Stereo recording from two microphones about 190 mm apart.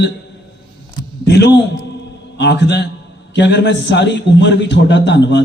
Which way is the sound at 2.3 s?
65° left (ahead or behind).